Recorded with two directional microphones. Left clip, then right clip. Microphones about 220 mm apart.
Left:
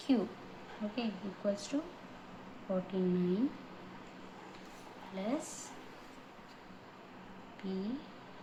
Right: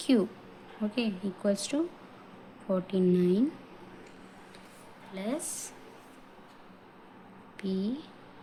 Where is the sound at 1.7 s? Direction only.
45° right (ahead or behind).